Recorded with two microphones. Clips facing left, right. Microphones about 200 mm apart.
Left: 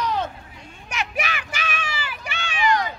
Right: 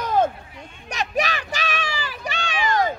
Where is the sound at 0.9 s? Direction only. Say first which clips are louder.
Right 4 dB; 35° right (ahead or behind).